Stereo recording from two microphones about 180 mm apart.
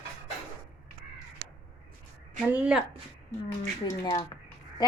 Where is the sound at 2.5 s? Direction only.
5° right (ahead or behind).